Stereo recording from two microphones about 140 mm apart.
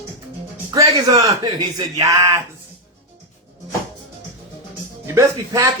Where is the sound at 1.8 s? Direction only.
25° right (ahead or behind).